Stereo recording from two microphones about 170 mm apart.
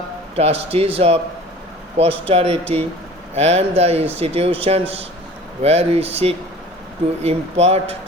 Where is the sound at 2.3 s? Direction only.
35° right (ahead or behind).